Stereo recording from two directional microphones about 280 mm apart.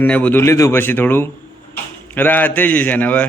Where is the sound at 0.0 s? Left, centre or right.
Centre.